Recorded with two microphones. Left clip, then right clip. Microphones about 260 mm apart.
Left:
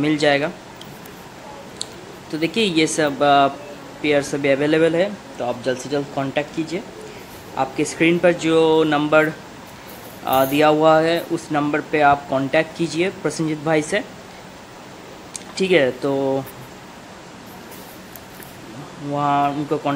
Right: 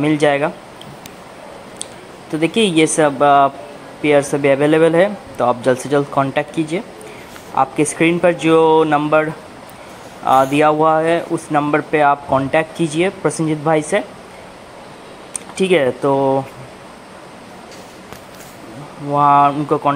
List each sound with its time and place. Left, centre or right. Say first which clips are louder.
0.0 s speech: right 3 dB; centre
2.4 s a man's voice: right 4 dB; centre
15.5 s speech: right 2 dB; centre
19.1 s speech: right 8 dB; centre